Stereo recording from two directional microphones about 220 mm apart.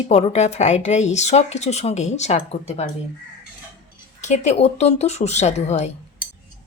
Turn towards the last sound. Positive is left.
turn(degrees=30)  # may be behind; listen again after turning